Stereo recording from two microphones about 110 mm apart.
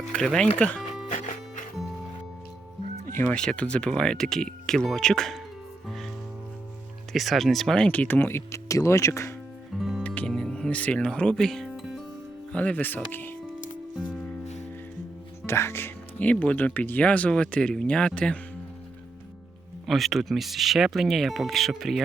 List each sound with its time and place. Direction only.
0.1 s speech: 5° left (ahead or behind)
1.0 s music: 90° left
3.2 s speech: 10° left (ahead or behind)
7.1 s speech: centre (ahead or behind); by 9.3 s 25° left (ahead or behind)
9.7 s music: centre (ahead or behind)
12.5 s speech: 15° left (ahead or behind)
13.9 s music: 5° left (ahead or behind)
15.4 s speech: 25° left (ahead or behind)
19.9 s speech: centre (ahead or behind)